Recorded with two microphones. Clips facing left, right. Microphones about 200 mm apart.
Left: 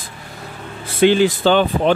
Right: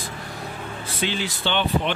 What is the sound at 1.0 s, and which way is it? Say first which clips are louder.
Speech: left 15 dB; 55° left (ahead or behind).